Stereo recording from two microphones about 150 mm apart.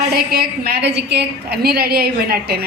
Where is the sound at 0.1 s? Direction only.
90° right.